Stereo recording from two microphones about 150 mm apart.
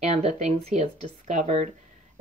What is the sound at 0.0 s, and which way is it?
Speech, 50° right (ahead or behind).